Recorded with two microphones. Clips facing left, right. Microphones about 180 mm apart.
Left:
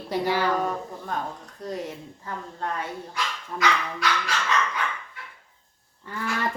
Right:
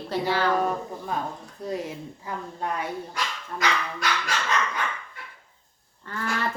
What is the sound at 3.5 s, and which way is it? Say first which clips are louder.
Speech: left 2 dB; 50° right (ahead or behind).